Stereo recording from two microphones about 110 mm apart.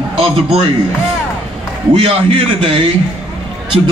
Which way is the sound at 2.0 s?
60° right (ahead or behind).